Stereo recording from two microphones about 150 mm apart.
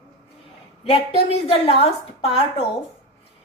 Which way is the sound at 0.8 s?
40° left (ahead or behind).